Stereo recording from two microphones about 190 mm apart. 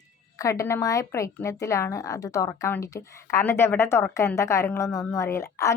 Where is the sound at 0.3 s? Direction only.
15° left (ahead or behind).